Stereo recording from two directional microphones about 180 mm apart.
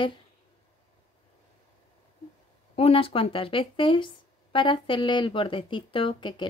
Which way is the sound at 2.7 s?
30° left (ahead or behind).